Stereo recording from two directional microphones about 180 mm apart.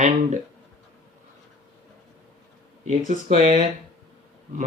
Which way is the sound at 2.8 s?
50° right (ahead or behind).